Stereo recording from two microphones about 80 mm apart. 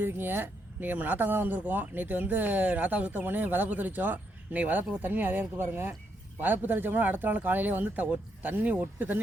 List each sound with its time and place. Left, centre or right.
0.0 s speech: right